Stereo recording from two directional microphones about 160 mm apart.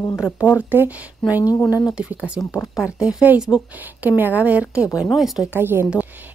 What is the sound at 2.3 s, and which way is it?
Speech, 20° left (ahead or behind).